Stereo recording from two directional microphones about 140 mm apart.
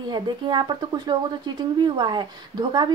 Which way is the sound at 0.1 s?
30° right (ahead or behind).